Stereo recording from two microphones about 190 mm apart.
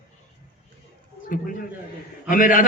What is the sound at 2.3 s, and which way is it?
Speech, 45° left (ahead or behind).